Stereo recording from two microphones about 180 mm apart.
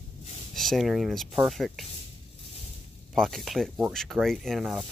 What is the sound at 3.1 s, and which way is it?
Speech, centre (ahead or behind).